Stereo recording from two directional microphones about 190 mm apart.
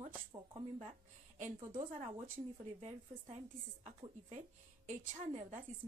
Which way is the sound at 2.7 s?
35° right (ahead or behind).